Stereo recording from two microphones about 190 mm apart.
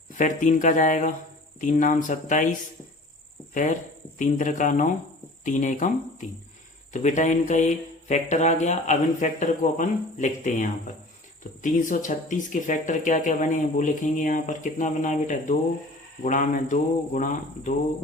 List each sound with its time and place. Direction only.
0.2 s speech: 45° left (ahead or behind)